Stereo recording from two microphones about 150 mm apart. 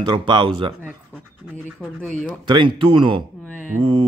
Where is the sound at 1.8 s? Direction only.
5° left (ahead or behind).